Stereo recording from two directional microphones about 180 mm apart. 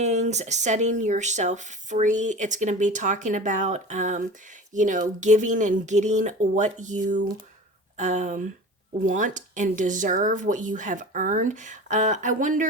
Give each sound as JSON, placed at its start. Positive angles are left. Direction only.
{"t": 0.0, "sound": "speech", "side_deg": -40}